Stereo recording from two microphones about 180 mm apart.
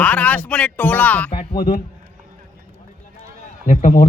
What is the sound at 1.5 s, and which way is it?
Speech, 55° left (ahead or behind).